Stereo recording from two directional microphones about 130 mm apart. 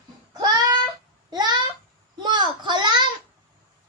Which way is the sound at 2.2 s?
35° right (ahead or behind).